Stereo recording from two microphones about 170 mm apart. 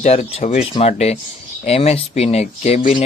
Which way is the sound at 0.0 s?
40° left (ahead or behind).